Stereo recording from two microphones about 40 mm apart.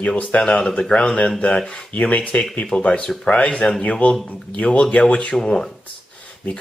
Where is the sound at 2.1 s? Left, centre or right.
Left.